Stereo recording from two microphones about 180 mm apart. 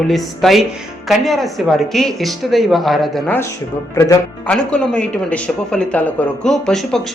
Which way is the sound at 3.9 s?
20° left (ahead or behind).